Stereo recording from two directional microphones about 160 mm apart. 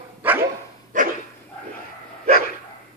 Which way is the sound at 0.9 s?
55° right (ahead or behind).